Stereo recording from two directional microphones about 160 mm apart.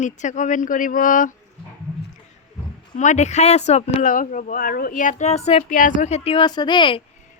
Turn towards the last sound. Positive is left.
turn(degrees=30)  # may be behind; listen again after turning